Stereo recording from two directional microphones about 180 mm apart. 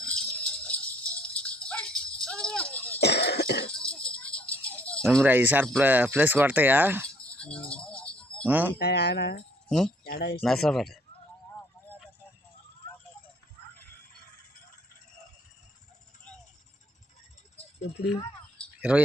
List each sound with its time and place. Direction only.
0.0 s rattle: 5° left (ahead or behind)
3.0 s cough: 65° left (ahead or behind)
3.7 s music: 5° left (ahead or behind)
4.6 s rattle: 5° left (ahead or behind)
5.2 s speech: 10° right (ahead or behind)
7.3 s a sound: 5° left (ahead or behind)
8.4 s speech: 10° right (ahead or behind)
8.8 s speech: 65° left (ahead or behind)
9.6 s speech: 5° left (ahead or behind)
10.1 s speech: 65° left (ahead or behind)
10.4 s speech: centre (ahead or behind)
17.9 s speech: 35° left (ahead or behind)
18.8 s speech: 5° right (ahead or behind)